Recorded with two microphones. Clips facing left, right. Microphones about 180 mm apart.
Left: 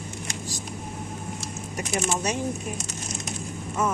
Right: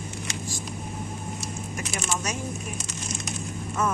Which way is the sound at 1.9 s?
25° left (ahead or behind).